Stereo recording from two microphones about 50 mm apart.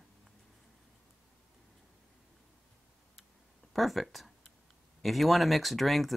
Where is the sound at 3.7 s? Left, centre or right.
Centre.